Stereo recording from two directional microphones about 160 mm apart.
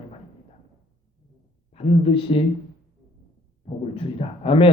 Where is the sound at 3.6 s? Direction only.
40° left (ahead or behind).